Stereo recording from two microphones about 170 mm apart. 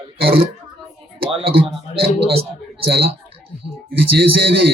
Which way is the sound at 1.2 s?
30° right (ahead or behind).